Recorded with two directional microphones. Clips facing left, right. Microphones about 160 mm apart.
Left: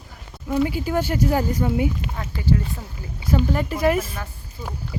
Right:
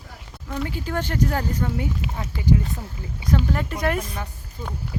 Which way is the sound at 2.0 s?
15° right (ahead or behind).